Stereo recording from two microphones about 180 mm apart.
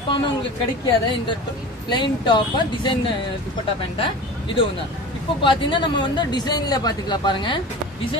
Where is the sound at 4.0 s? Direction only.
30° left (ahead or behind).